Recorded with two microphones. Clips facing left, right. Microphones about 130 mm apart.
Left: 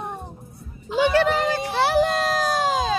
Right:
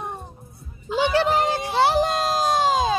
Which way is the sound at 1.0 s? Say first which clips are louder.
Left 1 dB; 25° right (ahead or behind).